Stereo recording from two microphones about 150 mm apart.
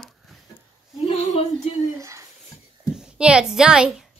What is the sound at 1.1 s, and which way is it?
Speech, 45° left (ahead or behind).